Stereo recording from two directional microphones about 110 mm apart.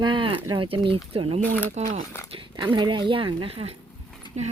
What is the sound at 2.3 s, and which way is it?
Speech, 45° right (ahead or behind).